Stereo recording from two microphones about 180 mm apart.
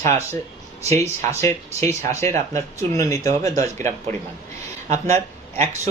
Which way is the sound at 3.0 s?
20° left (ahead or behind).